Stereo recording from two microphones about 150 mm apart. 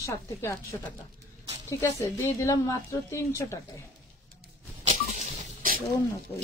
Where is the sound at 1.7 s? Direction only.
20° left (ahead or behind).